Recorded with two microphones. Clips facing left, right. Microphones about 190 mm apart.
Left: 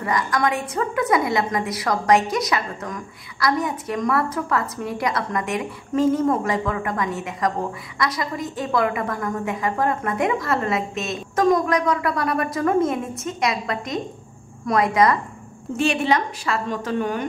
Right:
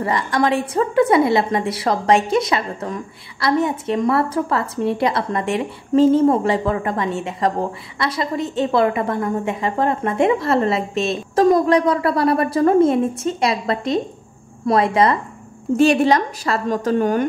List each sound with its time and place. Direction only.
0.0 s a woman's voice: 30° right (ahead or behind)
15.8 s a woman's voice: 40° right (ahead or behind)